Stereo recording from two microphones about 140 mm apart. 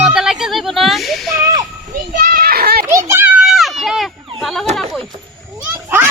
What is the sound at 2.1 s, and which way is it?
Children playing, 90° right.